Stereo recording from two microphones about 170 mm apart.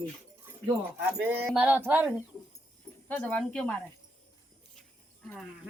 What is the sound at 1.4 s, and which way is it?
Speech, 10° right (ahead or behind).